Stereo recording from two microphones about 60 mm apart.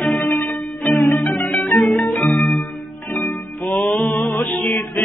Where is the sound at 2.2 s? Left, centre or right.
Centre.